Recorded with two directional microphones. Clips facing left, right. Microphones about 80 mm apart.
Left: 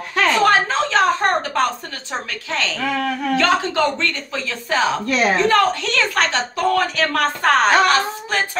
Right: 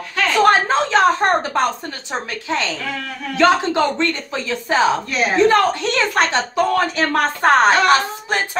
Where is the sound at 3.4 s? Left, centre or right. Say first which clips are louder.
Right 5 dB; right.